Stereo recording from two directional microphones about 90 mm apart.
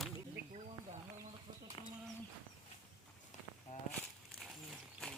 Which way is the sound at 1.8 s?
80° left.